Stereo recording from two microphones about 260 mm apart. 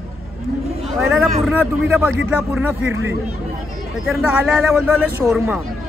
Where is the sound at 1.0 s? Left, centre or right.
Centre.